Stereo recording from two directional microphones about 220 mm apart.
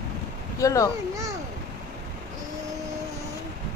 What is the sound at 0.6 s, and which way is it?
Speech, 15° left (ahead or behind).